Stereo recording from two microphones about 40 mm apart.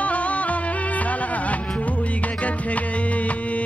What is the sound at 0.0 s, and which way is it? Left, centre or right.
Music, left.